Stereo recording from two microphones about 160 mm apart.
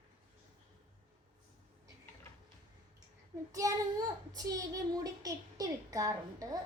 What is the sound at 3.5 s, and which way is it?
A child's voice, 20° right (ahead or behind).